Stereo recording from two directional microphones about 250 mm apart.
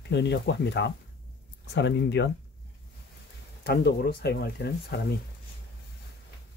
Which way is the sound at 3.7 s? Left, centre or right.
Left.